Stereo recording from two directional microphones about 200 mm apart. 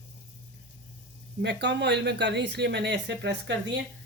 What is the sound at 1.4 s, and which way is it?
Speech, 60° right (ahead or behind).